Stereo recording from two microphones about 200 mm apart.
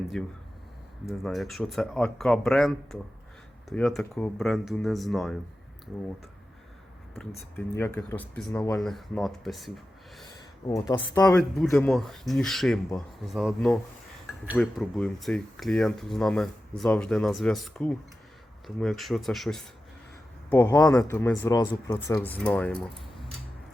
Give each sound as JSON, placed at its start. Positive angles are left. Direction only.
{"t": 0.1, "sound": "speech", "side_deg": 5}
{"t": 7.2, "sound": "speech", "side_deg": 10}
{"t": 10.7, "sound": "speech", "side_deg": 15}
{"t": 11.3, "sound": "speech", "side_deg": 5}
{"t": 20.5, "sound": "speech", "side_deg": 15}
{"t": 20.8, "sound": "speech", "side_deg": 5}